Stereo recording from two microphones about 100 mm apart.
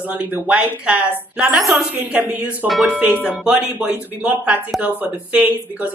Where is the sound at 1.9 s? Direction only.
15° right (ahead or behind).